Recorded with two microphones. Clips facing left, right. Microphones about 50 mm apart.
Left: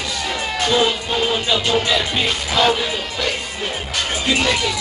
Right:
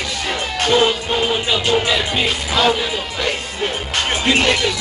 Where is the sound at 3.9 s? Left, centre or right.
Right.